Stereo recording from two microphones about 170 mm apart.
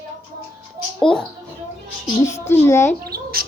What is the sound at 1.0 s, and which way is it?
Speech, 5° left (ahead or behind).